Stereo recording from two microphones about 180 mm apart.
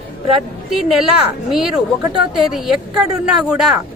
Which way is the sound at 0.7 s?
Centre (ahead or behind).